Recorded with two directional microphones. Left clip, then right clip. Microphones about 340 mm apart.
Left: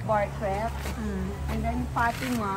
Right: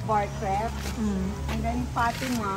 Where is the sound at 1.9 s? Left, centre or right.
Centre.